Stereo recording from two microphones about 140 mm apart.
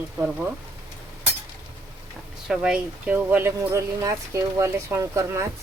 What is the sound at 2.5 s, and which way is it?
Speech, 5° right (ahead or behind).